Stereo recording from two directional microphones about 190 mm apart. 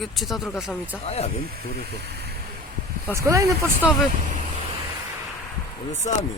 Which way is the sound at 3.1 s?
15° right (ahead or behind).